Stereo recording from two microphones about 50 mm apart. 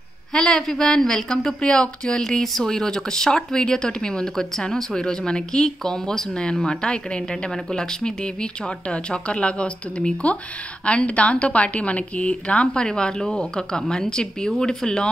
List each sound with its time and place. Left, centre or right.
0.3 s speech: centre
2.2 s speech: centre
2.6 s speech: centre